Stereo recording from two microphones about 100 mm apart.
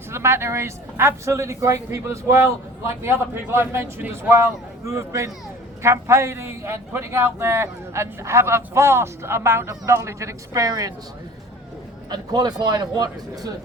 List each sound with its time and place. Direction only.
0.1 s a man's voice: 25° right (ahead or behind)
12.0 s a man's voice: 45° right (ahead or behind)